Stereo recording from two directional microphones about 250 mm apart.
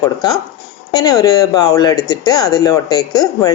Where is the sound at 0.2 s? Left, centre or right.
Centre.